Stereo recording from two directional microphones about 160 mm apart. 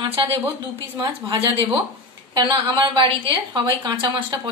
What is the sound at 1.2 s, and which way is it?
A woman's voice, 30° right (ahead or behind).